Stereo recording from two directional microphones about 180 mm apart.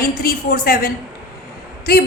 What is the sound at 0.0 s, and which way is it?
Speech, 55° left (ahead or behind).